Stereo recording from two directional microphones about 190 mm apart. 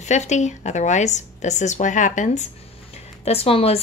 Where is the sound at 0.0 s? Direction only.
35° left (ahead or behind).